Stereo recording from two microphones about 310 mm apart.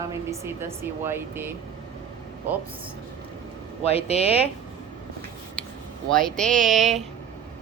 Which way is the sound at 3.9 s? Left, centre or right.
Centre.